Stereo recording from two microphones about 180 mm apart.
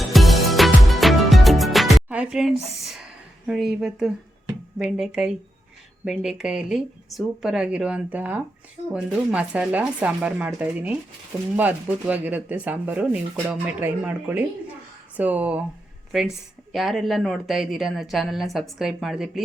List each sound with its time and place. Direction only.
0.1 s music: centre (ahead or behind)
3.4 s a woman's voice: centre (ahead or behind)
16.7 s a woman's voice: centre (ahead or behind)